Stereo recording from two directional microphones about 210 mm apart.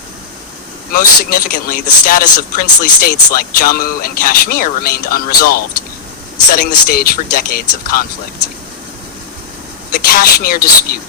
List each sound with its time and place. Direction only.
0.9 s speech: 40° left (ahead or behind)
9.9 s speech: 45° left (ahead or behind)